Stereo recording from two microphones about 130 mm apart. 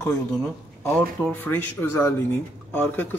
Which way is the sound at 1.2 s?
10° left (ahead or behind).